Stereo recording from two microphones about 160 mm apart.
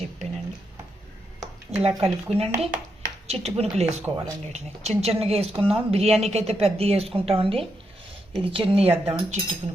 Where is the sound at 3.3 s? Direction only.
40° right (ahead or behind).